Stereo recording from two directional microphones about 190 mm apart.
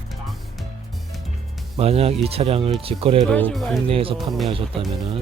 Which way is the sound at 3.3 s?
5° left (ahead or behind).